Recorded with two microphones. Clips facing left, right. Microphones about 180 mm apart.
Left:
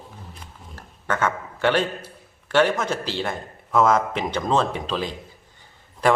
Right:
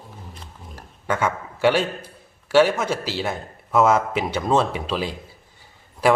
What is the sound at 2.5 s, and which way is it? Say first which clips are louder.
A man's voice: right 3 dB; 10° right (ahead or behind).